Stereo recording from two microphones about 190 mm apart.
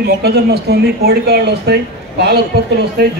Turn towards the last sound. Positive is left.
turn(degrees=-60)  # may be behind; listen again after turning